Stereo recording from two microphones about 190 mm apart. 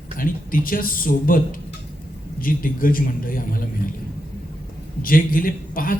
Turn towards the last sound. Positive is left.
turn(degrees=45)  # may be behind; listen again after turning